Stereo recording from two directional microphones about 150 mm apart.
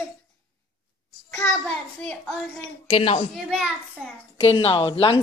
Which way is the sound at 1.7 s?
10° left (ahead or behind).